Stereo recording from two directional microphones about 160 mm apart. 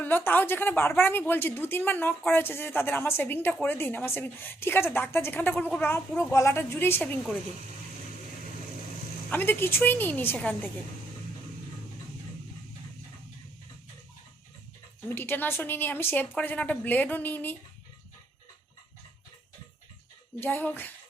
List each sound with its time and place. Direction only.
0.0 s speech: 10° left (ahead or behind)
9.3 s speech: 10° left (ahead or behind)
15.1 s speech: 10° left (ahead or behind)
20.4 s speech: 10° left (ahead or behind)